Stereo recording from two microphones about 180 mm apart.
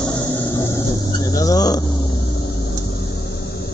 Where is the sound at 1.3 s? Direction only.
20° left (ahead or behind).